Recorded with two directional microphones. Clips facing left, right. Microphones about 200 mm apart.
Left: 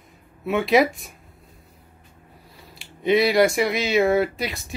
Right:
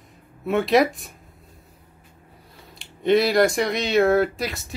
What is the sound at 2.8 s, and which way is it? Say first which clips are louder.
Speech: right 1 dB; centre (ahead or behind).